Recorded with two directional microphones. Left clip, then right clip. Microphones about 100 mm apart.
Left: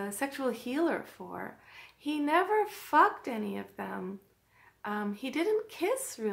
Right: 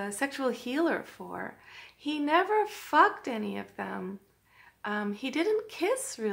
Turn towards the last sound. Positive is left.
turn(degrees=-25)  # may be behind; listen again after turning